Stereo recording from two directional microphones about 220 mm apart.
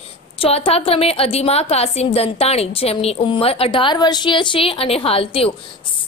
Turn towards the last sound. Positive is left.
turn(degrees=25)  # may be behind; listen again after turning